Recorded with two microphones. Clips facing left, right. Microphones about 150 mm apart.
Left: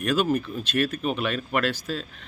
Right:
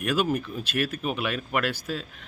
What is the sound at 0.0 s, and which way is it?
Speech, 10° right (ahead or behind).